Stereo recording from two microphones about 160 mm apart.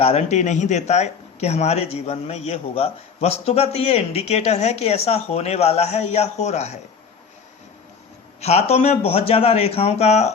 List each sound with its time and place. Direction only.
0.0 s a man's voice: 45° left (ahead or behind)
8.4 s a man's voice: 40° left (ahead or behind)